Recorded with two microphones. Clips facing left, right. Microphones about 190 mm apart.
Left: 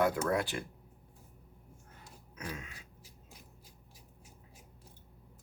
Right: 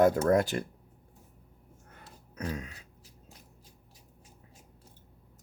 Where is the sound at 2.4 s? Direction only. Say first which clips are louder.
Right 7 dB; 40° right (ahead or behind).